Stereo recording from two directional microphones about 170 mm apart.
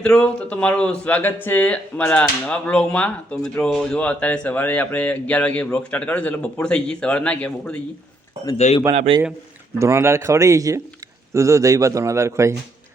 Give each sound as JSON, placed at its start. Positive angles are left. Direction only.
{"t": 0.0, "sound": "speech", "side_deg": 5}
{"t": 8.5, "sound": "speech", "side_deg": 40}
{"t": 8.9, "sound": "a man's voice", "side_deg": -35}
{"t": 9.7, "sound": "a man's voice", "side_deg": -15}